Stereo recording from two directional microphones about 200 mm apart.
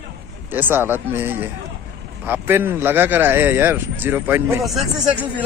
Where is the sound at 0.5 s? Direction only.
10° right (ahead or behind).